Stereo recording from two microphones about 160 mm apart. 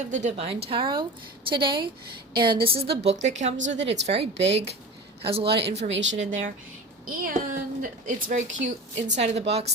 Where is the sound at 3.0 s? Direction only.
45° right (ahead or behind).